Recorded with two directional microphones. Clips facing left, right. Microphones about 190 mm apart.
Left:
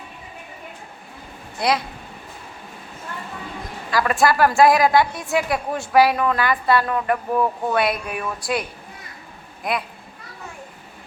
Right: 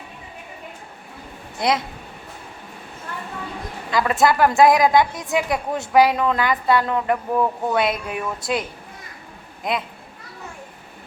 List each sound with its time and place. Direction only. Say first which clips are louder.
1.5 s speech: even; 20° right (ahead or behind)
3.9 s a woman's voice: even; 20° right (ahead or behind)
9.7 s a woman's voice: even; 20° right (ahead or behind)